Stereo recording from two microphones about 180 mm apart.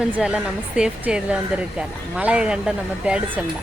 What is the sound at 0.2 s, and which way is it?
Speech, 5° right (ahead or behind).